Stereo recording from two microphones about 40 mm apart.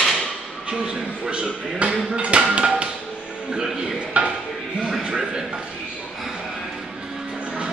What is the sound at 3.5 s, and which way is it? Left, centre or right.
Speech, right.